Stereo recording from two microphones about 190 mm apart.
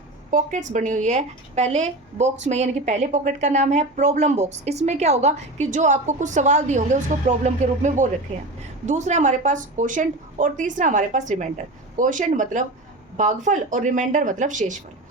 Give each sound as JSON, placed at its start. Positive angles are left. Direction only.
{"t": 0.3, "sound": "speech", "side_deg": -45}